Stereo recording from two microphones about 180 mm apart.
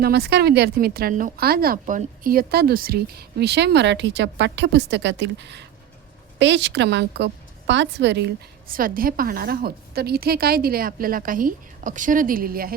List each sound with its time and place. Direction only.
0.0 s a woman's voice: 65° right (ahead or behind)
6.4 s a woman's voice: 85° right; by 12.7 s 55° right (ahead or behind)